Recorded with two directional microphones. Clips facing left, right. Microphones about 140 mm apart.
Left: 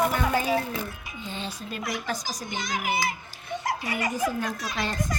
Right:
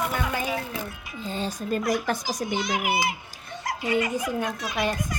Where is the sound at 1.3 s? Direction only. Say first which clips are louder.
Right 7 dB; 40° right (ahead or behind).